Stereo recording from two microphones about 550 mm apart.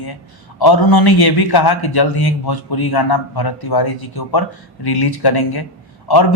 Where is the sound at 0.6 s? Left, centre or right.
Left.